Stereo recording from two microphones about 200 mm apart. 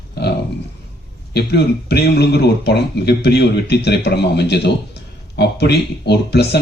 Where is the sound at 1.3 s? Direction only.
55° left (ahead or behind).